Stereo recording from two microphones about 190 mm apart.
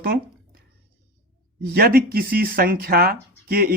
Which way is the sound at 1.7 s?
50° right (ahead or behind).